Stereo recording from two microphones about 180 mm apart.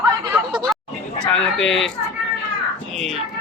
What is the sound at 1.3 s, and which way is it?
Speech, 5° left (ahead or behind).